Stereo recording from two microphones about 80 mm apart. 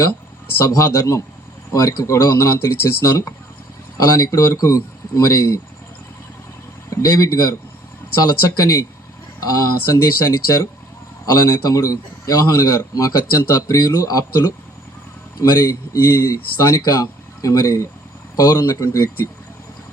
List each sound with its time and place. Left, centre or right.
0.6 s a man's voice: left
6.9 s a man's voice: left
8.3 s a man's voice: left
11.3 s a man's voice: left